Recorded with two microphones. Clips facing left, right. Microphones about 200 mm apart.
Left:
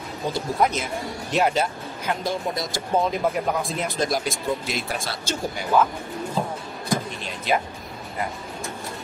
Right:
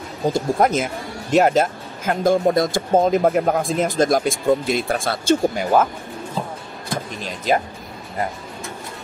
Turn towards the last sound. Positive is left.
turn(degrees=-40)  # may be behind; listen again after turning